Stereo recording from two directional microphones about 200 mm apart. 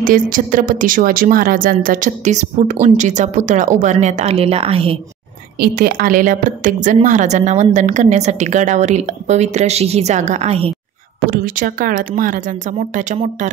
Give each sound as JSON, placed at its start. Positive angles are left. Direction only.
{"t": 0.0, "sound": "a woman's voice", "side_deg": -45}
{"t": 5.6, "sound": "a woman's voice", "side_deg": -50}
{"t": 11.2, "sound": "speech", "side_deg": -45}